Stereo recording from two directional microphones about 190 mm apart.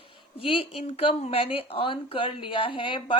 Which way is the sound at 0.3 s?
30° left (ahead or behind).